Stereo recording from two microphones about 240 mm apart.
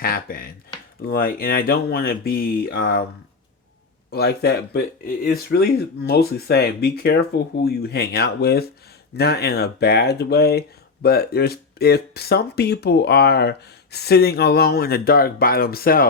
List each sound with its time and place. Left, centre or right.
0.0 s a sound: left
1.0 s speech: left
4.1 s speech: left